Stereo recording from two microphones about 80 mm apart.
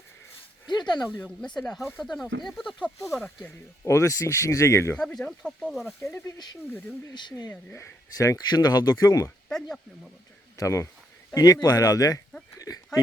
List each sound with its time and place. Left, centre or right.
0.7 s speech: left
1.4 s speech: centre
3.2 s speech: centre
3.8 s speech: left
4.9 s speech: centre
7.1 s speech: left
8.1 s speech: left
8.4 s speech: left
9.5 s speech: centre
10.6 s speech: left
11.3 s speech: left
12.5 s a sound: left